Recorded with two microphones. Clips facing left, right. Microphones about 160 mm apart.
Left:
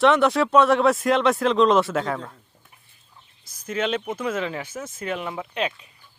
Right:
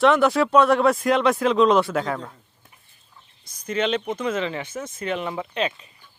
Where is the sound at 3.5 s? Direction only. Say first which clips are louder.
Right 2 dB; 5° left (ahead or behind).